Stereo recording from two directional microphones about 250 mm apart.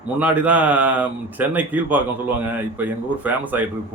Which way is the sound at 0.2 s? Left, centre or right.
Centre.